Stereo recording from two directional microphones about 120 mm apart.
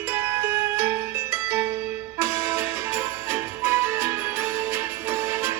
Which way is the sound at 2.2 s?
20° right (ahead or behind).